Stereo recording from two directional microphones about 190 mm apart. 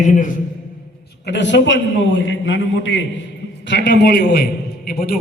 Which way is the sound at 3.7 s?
65° left (ahead or behind).